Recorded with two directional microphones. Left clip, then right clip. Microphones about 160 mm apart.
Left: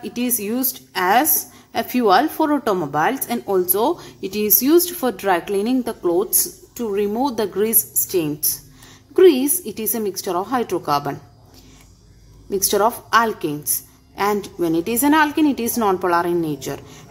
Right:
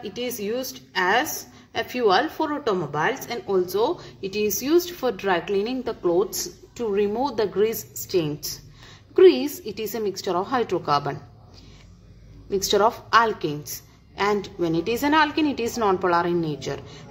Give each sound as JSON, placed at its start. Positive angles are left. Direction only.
{"t": 0.0, "sound": "a woman's voice", "side_deg": 55}
{"t": 6.0, "sound": "a woman's voice", "side_deg": 20}
{"t": 12.4, "sound": "a woman's voice", "side_deg": 25}